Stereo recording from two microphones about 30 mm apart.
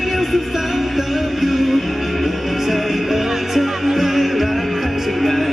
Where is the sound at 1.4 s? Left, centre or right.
Centre.